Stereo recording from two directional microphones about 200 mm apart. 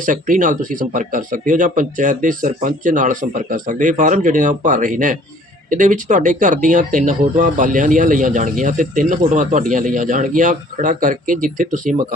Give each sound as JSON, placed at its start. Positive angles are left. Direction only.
{"t": 0.0, "sound": "speech", "side_deg": -40}